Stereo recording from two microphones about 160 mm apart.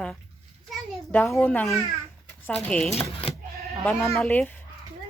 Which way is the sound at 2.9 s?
40° left (ahead or behind).